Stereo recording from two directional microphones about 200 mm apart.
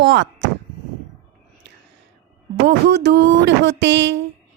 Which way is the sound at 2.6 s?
55° right (ahead or behind).